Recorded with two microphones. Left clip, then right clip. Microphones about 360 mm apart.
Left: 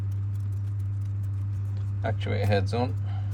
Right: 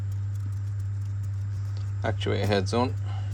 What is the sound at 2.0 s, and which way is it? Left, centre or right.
Speech, centre.